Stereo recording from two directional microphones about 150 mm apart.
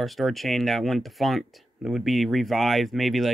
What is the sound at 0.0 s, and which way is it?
Speech, centre (ahead or behind).